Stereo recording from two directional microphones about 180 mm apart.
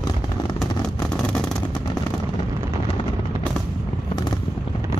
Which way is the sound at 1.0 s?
5° left (ahead or behind).